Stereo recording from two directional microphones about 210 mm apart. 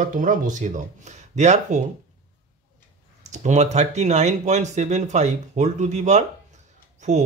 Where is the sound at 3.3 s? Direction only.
35° right (ahead or behind).